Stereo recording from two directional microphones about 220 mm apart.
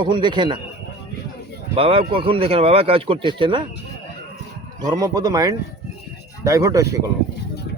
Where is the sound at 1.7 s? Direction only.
25° right (ahead or behind).